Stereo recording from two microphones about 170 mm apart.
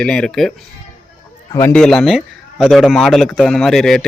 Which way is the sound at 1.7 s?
5° left (ahead or behind).